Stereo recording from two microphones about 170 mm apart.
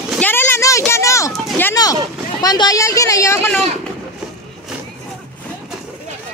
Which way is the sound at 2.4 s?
25° left (ahead or behind).